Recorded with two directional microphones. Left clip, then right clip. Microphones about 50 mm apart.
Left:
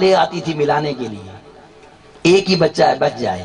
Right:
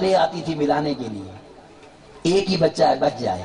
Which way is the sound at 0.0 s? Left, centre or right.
Left.